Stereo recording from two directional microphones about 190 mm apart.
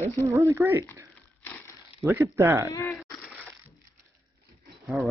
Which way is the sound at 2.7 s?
15° left (ahead or behind).